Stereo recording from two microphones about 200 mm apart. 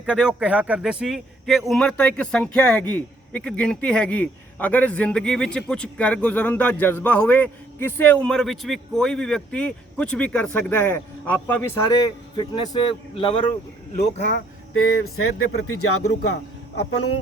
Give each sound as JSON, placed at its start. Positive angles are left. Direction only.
{"t": 0.0, "sound": "a man's voice", "side_deg": -5}
{"t": 11.9, "sound": "speech", "side_deg": 20}
{"t": 14.2, "sound": "speech", "side_deg": 40}
{"t": 14.7, "sound": "speech", "side_deg": 90}